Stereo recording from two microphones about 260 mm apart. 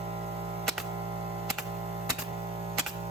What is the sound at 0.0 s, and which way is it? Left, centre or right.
Music, right.